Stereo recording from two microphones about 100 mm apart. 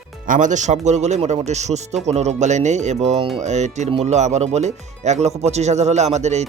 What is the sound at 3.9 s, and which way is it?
Speech, 90° right.